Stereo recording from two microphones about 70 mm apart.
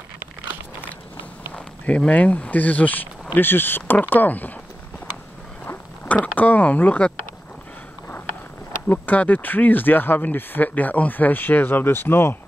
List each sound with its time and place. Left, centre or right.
1.5 s speech: centre
6.0 s speech: left
8.8 s speech: left